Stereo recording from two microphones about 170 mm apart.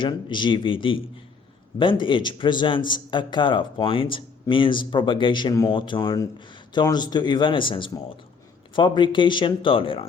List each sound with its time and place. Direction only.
0.0 s a man's voice: 25° left (ahead or behind)